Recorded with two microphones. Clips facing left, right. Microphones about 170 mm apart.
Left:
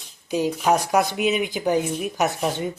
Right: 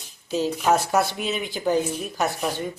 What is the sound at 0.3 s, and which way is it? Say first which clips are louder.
Speech: left 1 dB; 15° left (ahead or behind).